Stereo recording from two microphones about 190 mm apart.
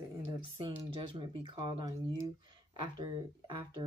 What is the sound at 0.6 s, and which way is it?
Speech, 25° right (ahead or behind).